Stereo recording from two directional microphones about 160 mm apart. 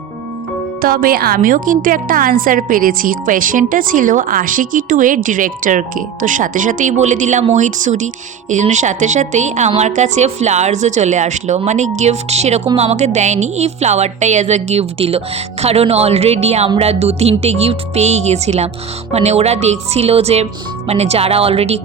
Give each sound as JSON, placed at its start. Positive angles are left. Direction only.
{"t": 0.8, "sound": "a woman's voice", "side_deg": -65}